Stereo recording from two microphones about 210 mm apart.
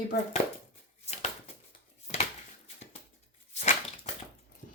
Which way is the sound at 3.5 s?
30° left (ahead or behind).